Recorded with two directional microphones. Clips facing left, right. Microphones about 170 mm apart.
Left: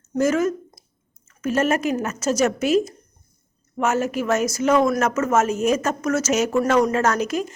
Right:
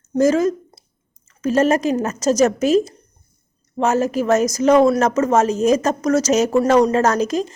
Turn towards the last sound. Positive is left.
turn(degrees=-35)  # may be behind; listen again after turning